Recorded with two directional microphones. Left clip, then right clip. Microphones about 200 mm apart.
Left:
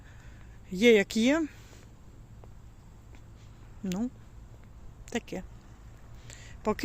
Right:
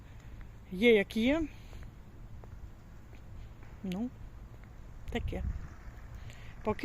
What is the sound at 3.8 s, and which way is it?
A woman's voice, 25° left (ahead or behind).